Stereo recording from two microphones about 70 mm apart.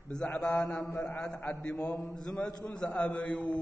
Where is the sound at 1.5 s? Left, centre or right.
Centre.